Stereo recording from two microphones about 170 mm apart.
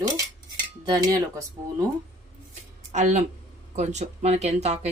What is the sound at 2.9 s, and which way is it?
Speech, 45° right (ahead or behind).